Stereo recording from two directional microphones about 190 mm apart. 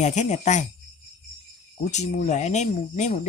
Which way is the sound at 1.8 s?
40° left (ahead or behind).